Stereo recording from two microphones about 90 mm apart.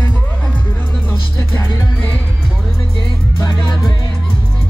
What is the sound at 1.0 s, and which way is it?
Music, 25° left (ahead or behind).